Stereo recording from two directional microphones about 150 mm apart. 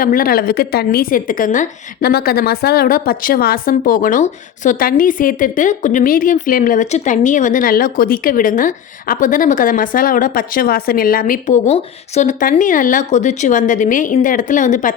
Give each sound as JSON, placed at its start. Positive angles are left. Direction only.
{"t": 0.0, "sound": "a woman's voice", "side_deg": 70}
{"t": 6.9, "sound": "a woman's voice", "side_deg": 55}